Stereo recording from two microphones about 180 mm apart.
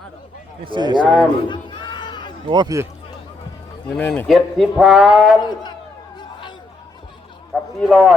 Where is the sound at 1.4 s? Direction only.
25° left (ahead or behind).